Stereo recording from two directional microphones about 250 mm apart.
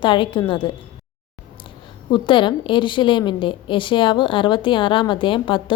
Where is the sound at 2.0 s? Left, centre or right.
Centre.